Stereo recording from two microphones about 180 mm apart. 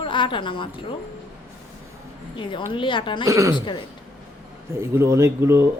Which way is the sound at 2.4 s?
25° left (ahead or behind).